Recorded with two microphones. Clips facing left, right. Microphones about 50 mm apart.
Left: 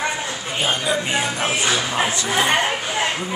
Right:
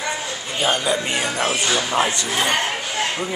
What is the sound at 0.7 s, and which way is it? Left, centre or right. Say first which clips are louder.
Speech: right 1 dB; centre.